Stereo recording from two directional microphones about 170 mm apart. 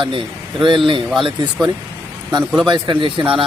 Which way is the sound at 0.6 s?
30° right (ahead or behind).